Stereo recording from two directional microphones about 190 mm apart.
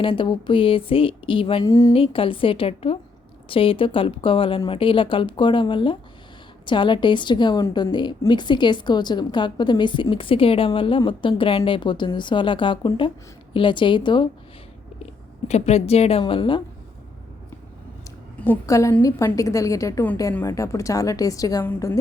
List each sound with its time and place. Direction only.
0.0 s a woman's voice: 25° left (ahead or behind)
15.4 s a woman's voice: 35° left (ahead or behind)
18.3 s a woman's voice: 10° left (ahead or behind)